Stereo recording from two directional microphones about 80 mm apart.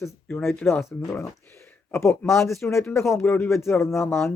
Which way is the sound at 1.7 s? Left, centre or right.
Left.